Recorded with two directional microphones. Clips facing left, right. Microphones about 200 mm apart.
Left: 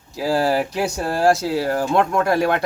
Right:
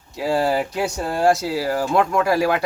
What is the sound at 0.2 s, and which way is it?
A man's voice, centre (ahead or behind).